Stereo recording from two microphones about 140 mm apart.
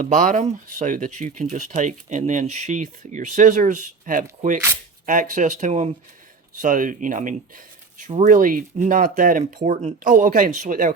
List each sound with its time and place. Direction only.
0.0 s speech: 65° right (ahead or behind)
6.6 s speech: 70° right (ahead or behind)